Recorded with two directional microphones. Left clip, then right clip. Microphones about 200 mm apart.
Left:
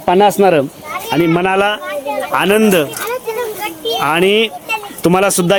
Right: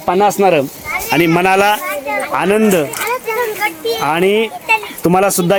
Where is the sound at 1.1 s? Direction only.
5° right (ahead or behind).